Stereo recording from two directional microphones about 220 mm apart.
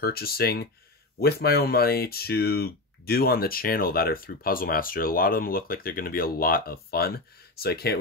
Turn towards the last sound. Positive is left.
turn(degrees=45)  # may be behind; listen again after turning